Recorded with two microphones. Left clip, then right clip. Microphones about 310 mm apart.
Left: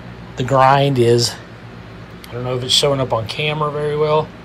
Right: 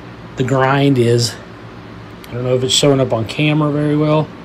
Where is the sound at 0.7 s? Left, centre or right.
Left.